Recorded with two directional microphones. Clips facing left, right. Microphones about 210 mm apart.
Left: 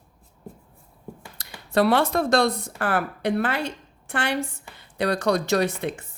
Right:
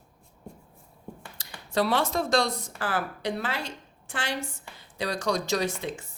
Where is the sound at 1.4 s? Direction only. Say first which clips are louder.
Left 6 dB; 60° left (ahead or behind).